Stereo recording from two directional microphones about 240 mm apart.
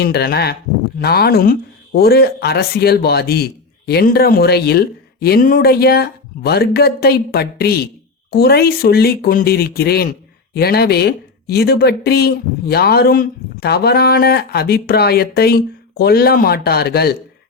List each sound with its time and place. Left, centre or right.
0.0 s speech: left